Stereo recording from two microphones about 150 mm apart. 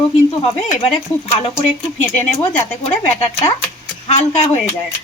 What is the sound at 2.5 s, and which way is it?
Speech, 10° left (ahead or behind).